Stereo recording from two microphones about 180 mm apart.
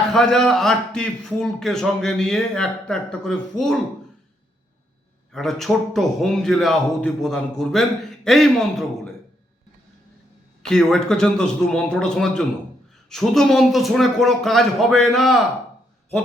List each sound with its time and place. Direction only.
0.1 s a man's voice: centre (ahead or behind)
5.3 s a man's voice: centre (ahead or behind)
10.6 s a man's voice: 5° left (ahead or behind)